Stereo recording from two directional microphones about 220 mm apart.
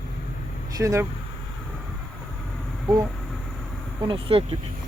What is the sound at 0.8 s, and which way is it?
Speech, 15° right (ahead or behind).